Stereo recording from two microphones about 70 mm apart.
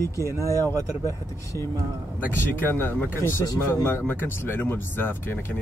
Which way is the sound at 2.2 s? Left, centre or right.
Left.